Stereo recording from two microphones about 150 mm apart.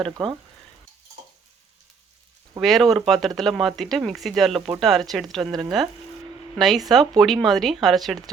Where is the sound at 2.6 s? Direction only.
Centre (ahead or behind).